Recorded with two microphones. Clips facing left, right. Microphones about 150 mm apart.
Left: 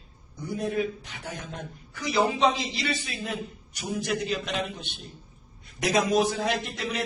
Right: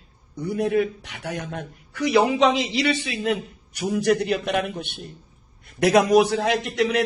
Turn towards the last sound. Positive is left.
turn(degrees=-75)  # may be behind; listen again after turning